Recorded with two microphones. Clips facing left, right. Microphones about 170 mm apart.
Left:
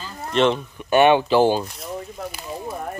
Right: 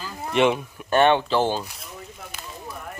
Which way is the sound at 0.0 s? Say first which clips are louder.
Left 1 dB; 10° right (ahead or behind).